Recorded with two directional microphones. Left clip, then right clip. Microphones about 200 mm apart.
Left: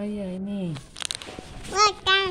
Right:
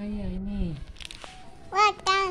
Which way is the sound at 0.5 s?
20° left (ahead or behind).